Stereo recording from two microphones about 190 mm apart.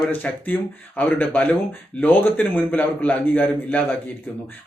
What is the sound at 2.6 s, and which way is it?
Speech, 10° left (ahead or behind).